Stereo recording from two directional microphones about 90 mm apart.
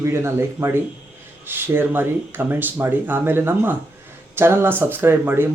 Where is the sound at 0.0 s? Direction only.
30° right (ahead or behind).